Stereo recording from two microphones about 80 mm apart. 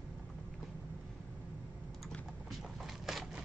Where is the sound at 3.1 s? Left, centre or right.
Centre.